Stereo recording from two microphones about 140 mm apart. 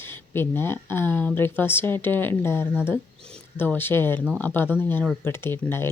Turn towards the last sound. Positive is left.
turn(degrees=15)  # may be behind; listen again after turning